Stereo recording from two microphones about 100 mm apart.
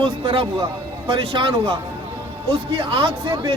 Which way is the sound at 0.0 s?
65° right (ahead or behind).